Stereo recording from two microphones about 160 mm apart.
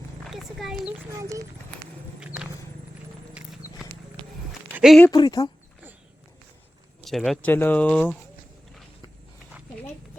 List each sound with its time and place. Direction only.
0.3 s horse: centre (ahead or behind)
1.2 s speech: 20° right (ahead or behind)
2.2 s walk: 5° right (ahead or behind)
3.4 s horse: 5° right (ahead or behind)
4.7 s a sound: 5° right (ahead or behind)
5.1 s speech: 25° left (ahead or behind)
7.0 s speech: centre (ahead or behind)